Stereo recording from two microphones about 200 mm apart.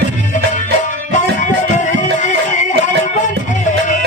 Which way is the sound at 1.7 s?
40° left (ahead or behind).